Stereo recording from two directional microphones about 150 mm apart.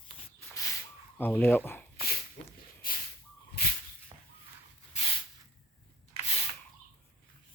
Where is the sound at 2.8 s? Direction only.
70° left (ahead or behind).